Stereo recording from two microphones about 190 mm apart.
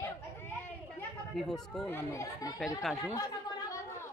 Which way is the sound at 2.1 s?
15° left (ahead or behind).